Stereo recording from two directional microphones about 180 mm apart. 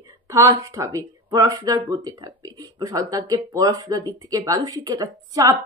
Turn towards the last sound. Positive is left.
turn(degrees=-20)  # may be behind; listen again after turning